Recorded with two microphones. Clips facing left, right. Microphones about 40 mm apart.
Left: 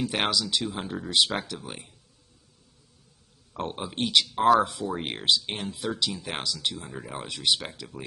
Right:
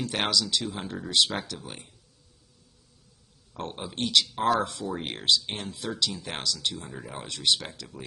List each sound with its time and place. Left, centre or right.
0.0 s speech: centre
3.5 s speech: centre